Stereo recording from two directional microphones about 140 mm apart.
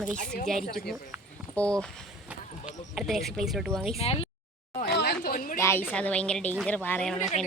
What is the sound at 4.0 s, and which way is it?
Speech, 45° left (ahead or behind).